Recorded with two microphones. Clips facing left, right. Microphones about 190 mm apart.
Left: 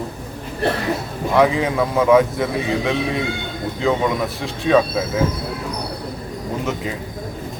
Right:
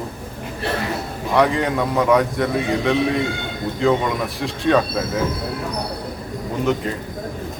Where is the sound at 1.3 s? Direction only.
Centre (ahead or behind).